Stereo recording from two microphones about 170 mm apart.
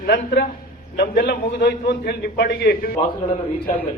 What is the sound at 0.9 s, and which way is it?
A man's voice, 70° left (ahead or behind).